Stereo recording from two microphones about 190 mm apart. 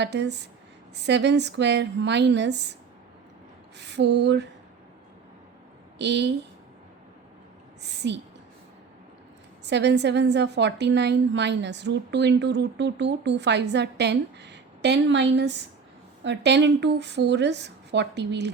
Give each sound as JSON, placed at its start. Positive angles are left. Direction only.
{"t": 0.0, "sound": "a woman's voice", "side_deg": -65}
{"t": 3.8, "sound": "a woman's voice", "side_deg": -65}
{"t": 6.0, "sound": "a woman's voice", "side_deg": -65}
{"t": 8.0, "sound": "a woman's voice", "side_deg": -65}
{"t": 9.6, "sound": "a woman's voice", "side_deg": -65}